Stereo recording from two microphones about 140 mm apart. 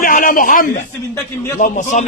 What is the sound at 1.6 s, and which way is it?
Speech, 60° left (ahead or behind).